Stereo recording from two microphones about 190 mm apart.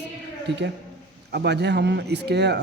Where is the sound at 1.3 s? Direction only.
60° right (ahead or behind).